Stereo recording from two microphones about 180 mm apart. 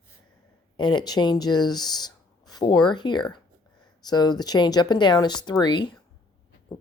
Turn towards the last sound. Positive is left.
turn(degrees=25)  # may be behind; listen again after turning